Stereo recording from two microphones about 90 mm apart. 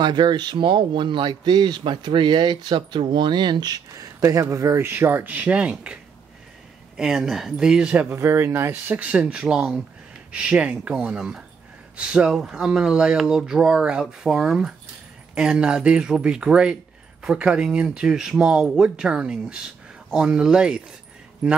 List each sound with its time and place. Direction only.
0.0 s a man's voice: 55° right (ahead or behind); by 5.9 s 15° right (ahead or behind)
7.0 s speech: 5° right (ahead or behind)
8.1 s speech: 30° right (ahead or behind); by 21.6 s 5° right (ahead or behind)